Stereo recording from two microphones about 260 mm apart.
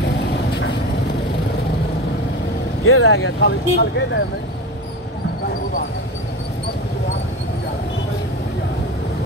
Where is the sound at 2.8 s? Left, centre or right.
Left.